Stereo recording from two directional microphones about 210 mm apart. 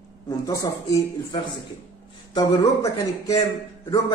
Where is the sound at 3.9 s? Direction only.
20° left (ahead or behind).